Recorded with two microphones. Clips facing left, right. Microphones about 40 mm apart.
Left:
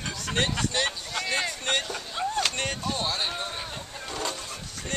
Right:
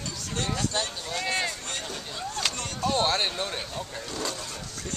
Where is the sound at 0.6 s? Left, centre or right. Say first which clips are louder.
Left 2 dB; left.